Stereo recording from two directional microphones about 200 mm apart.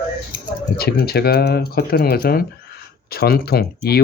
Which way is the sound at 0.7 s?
50° left (ahead or behind).